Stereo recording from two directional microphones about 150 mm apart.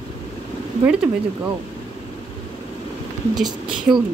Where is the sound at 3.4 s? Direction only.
30° right (ahead or behind).